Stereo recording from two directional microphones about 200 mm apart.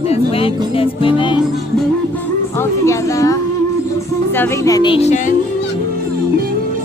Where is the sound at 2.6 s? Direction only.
15° left (ahead or behind); by 5.3 s 35° left (ahead or behind).